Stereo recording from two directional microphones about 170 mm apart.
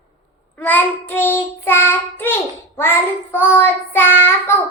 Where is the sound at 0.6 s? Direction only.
10° left (ahead or behind).